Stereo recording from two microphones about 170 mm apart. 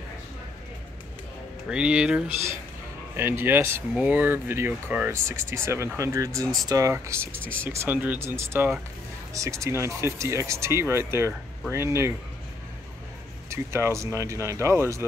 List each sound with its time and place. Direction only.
1.7 s speech: 5° right (ahead or behind)
13.5 s speech: 15° right (ahead or behind)